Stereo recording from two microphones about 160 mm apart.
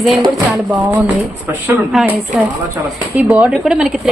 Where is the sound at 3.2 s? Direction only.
5° right (ahead or behind).